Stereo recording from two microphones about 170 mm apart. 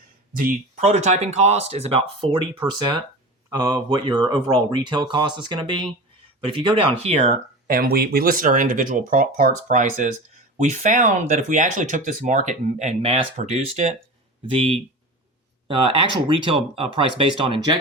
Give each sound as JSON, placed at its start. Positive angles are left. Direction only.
{"t": 0.3, "sound": "speech", "side_deg": -50}
{"t": 7.7, "sound": "speech", "side_deg": -65}